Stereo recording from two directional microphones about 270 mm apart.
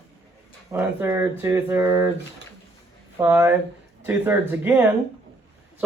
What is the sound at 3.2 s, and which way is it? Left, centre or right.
Speech, centre.